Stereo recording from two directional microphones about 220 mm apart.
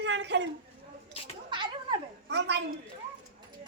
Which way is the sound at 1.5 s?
20° right (ahead or behind).